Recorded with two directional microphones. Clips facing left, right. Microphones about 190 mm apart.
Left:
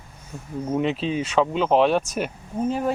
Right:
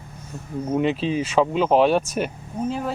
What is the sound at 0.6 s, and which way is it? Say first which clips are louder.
Speech: right 2 dB; 5° right (ahead or behind).